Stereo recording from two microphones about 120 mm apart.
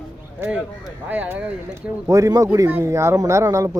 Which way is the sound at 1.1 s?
15° right (ahead or behind).